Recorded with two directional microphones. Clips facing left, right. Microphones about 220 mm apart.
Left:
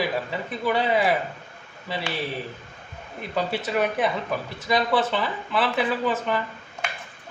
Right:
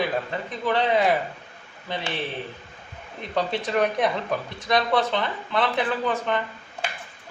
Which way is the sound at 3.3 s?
5° left (ahead or behind).